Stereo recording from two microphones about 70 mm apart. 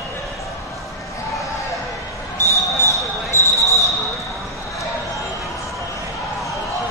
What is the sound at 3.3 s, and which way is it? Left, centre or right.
Basketball bounce, left.